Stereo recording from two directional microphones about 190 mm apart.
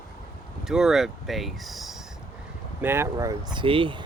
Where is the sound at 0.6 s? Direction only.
Centre (ahead or behind).